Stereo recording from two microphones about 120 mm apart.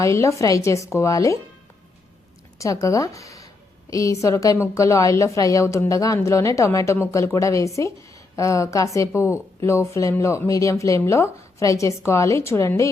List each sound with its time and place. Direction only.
0.0 s speech: 25° left (ahead or behind)
2.6 s speech: 25° left (ahead or behind)